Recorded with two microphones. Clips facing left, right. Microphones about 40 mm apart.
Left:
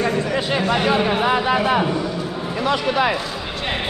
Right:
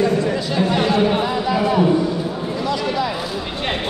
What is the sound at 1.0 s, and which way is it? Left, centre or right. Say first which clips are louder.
Speech: even; left.